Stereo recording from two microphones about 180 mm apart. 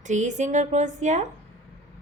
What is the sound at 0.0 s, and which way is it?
A woman's voice, 45° right (ahead or behind).